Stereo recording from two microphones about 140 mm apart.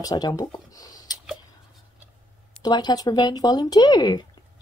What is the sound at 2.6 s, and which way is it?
Speech, 30° left (ahead or behind).